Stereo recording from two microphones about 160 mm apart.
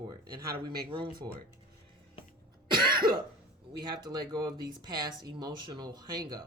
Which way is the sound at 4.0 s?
25° right (ahead or behind).